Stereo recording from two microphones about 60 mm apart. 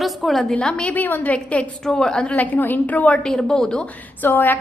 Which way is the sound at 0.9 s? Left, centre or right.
Left.